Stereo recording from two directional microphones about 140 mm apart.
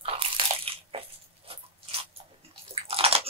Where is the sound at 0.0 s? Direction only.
40° right (ahead or behind).